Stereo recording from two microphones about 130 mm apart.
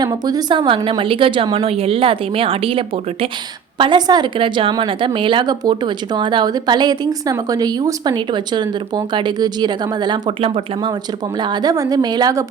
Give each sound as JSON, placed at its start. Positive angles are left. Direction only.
{"t": 0.0, "sound": "a woman's voice", "side_deg": -30}